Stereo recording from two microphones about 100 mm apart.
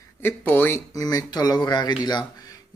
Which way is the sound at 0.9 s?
40° left (ahead or behind).